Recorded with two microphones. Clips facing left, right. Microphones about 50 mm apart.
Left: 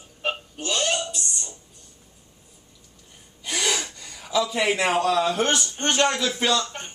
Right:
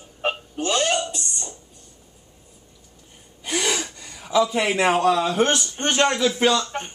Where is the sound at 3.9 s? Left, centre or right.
Centre.